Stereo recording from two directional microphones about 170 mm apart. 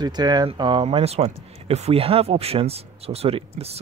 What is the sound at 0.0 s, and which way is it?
Speech, 25° right (ahead or behind).